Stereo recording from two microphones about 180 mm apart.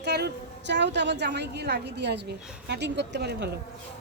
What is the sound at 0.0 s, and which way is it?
A woman's voice, 70° right (ahead or behind).